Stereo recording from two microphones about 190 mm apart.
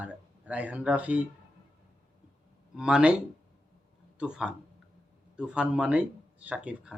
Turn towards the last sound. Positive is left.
turn(degrees=-5)  # may be behind; listen again after turning